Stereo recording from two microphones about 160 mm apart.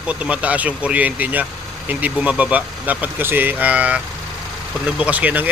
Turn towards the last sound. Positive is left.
turn(degrees=-10)  # may be behind; listen again after turning